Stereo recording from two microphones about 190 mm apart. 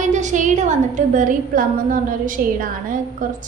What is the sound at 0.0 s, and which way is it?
A woman's voice, 40° right (ahead or behind).